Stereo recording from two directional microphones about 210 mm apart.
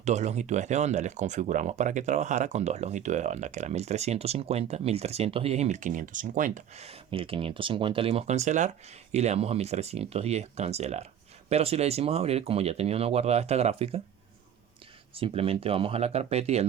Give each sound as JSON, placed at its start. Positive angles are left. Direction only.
{"t": 0.0, "sound": "speech", "side_deg": -35}
{"t": 15.1, "sound": "speech", "side_deg": -25}